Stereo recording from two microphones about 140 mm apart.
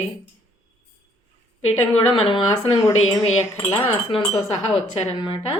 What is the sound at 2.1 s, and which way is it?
Speech, 40° left (ahead or behind).